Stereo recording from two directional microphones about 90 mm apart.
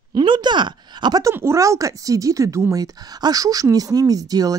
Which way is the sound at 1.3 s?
30° right (ahead or behind).